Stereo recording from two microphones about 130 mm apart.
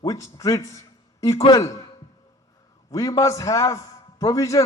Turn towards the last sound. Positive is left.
turn(degrees=25)  # may be behind; listen again after turning